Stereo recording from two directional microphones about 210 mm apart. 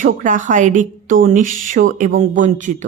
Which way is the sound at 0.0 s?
35° right (ahead or behind).